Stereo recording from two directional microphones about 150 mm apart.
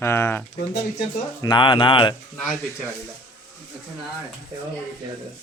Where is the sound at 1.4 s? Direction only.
30° left (ahead or behind).